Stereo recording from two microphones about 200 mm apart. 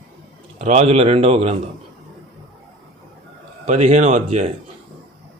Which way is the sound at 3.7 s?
35° right (ahead or behind).